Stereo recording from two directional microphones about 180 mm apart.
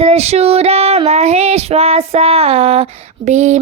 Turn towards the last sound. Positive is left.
turn(degrees=-40)  # may be behind; listen again after turning